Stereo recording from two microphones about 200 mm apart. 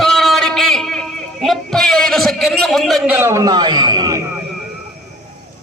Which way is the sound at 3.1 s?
15° right (ahead or behind).